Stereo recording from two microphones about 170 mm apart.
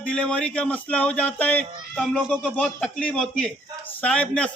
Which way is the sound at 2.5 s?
5° left (ahead or behind).